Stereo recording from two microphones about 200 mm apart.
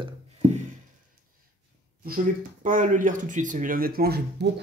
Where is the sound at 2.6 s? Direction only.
40° right (ahead or behind).